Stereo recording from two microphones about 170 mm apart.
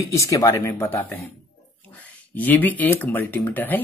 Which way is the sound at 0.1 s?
20° left (ahead or behind).